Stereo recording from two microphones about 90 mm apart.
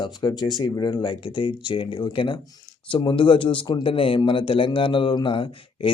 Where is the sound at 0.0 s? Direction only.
55° left (ahead or behind).